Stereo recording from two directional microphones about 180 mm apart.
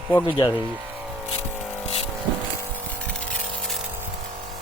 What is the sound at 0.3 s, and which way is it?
Speech, 25° left (ahead or behind).